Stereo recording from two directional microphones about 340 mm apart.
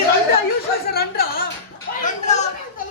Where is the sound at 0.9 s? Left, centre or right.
Left.